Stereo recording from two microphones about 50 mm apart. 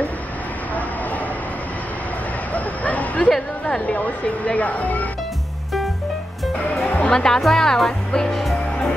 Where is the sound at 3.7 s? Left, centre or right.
Left.